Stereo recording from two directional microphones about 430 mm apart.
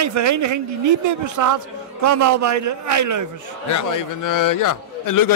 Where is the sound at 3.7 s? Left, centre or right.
Left.